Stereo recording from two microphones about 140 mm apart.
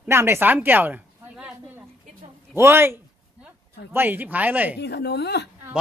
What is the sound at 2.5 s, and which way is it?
Speech, 15° right (ahead or behind).